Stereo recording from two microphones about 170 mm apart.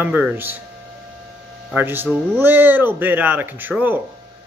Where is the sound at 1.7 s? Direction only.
10° right (ahead or behind).